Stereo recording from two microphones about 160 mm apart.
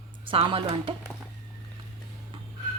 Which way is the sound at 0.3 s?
35° right (ahead or behind).